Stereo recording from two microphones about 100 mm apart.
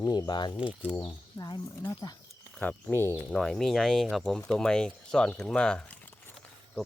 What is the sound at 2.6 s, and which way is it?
Speech, 15° left (ahead or behind).